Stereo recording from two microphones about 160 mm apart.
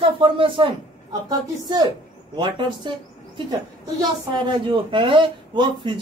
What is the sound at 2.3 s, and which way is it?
A woman's voice, 30° right (ahead or behind).